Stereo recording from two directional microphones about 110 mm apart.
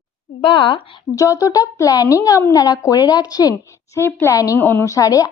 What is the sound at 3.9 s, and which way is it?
A woman's voice, 25° left (ahead or behind).